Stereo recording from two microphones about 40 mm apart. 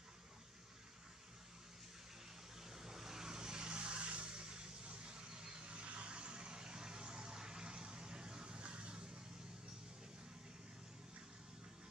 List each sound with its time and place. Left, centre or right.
2.6 s vehicle: centre